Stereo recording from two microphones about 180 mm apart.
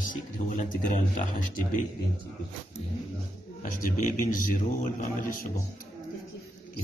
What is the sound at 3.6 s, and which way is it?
A man's voice, 50° left (ahead or behind).